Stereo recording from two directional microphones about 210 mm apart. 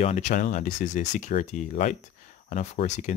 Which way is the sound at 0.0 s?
35° left (ahead or behind).